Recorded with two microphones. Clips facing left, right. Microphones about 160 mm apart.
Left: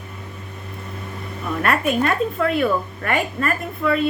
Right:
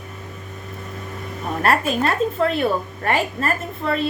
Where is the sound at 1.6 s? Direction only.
35° right (ahead or behind).